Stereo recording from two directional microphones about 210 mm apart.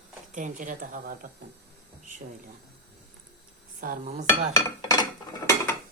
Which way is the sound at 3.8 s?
35° right (ahead or behind).